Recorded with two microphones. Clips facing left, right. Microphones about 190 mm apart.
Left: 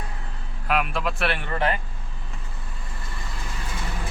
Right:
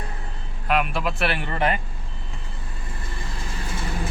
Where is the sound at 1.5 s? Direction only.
20° right (ahead or behind).